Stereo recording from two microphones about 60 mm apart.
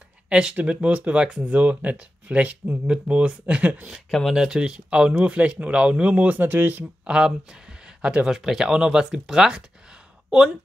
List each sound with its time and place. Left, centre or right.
0.3 s speech: centre
4.1 s speech: centre
4.4 s speech: centre; by 6.9 s right
7.1 s speech: centre
8.3 s speech: centre